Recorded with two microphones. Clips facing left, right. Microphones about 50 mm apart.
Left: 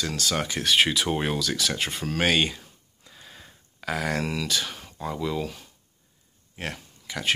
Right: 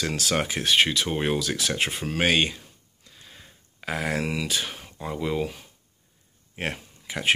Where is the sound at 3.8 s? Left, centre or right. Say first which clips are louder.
Even; centre.